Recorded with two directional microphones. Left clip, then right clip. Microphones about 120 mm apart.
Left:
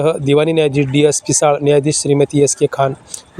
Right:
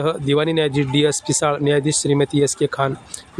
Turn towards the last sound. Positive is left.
turn(degrees=20)  # may be behind; listen again after turning